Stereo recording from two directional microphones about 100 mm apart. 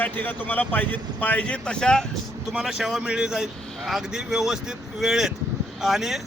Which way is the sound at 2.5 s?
5° right (ahead or behind).